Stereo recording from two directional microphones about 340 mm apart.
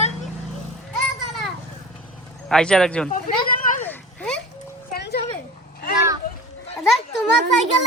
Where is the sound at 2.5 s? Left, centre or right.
Centre.